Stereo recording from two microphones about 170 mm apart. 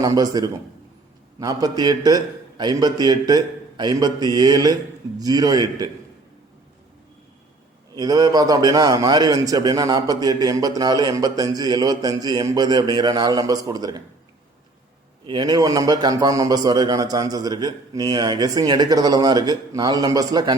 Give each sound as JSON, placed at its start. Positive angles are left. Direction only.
{"t": 0.0, "sound": "a man's voice", "side_deg": -20}
{"t": 7.9, "sound": "a man's voice", "side_deg": -20}
{"t": 15.3, "sound": "a man's voice", "side_deg": -25}